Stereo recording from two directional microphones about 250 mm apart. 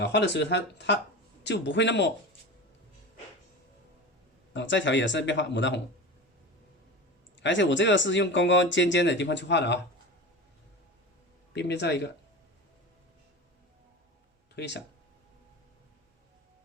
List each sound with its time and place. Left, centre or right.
0.0 s speech: left
4.5 s speech: left
7.3 s speech: left
11.5 s speech: left
14.5 s speech: left